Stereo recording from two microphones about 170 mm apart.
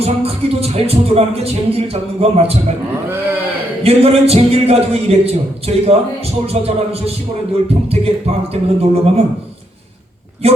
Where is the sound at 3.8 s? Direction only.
35° right (ahead or behind).